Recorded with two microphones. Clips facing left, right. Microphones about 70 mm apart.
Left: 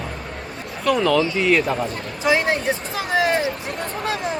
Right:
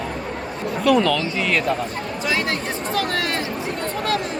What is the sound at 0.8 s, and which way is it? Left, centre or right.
Speech, centre.